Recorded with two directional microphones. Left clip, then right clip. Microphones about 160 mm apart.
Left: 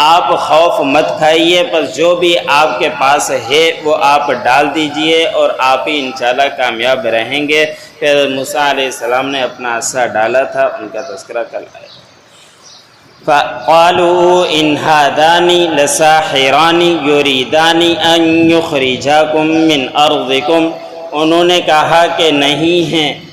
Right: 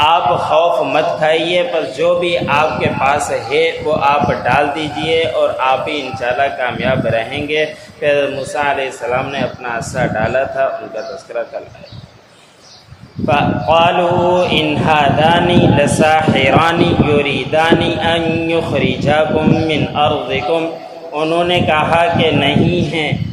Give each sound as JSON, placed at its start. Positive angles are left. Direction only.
{"t": 0.0, "sound": "a man's voice", "side_deg": 30}
{"t": 13.2, "sound": "a man's voice", "side_deg": 30}